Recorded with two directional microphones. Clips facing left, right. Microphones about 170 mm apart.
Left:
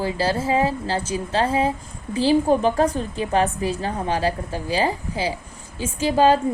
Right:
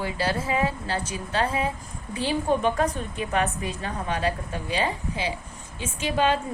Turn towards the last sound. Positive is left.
turn(degrees=35)  # may be behind; listen again after turning